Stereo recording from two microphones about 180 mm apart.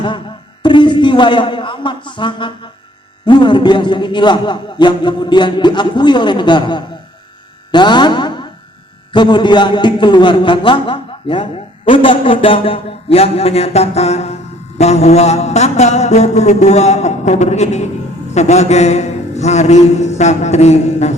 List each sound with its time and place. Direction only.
0.6 s a man's voice: 25° left (ahead or behind)
14.8 s mantra: 35° left (ahead or behind)